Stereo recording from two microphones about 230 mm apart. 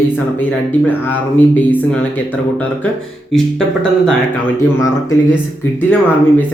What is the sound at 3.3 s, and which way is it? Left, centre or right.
Speech, centre.